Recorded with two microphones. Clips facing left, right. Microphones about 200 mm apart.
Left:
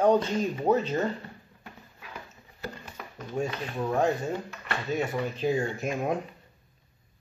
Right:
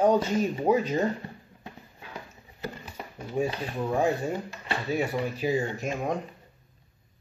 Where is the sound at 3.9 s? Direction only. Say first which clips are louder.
Even; 10° right (ahead or behind).